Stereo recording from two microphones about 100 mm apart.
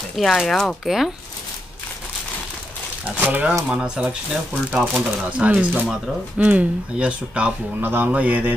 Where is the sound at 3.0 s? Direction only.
15° right (ahead or behind).